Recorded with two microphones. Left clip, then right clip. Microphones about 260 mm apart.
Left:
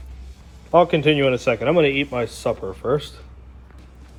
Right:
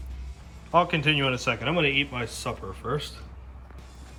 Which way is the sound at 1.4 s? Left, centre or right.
Centre.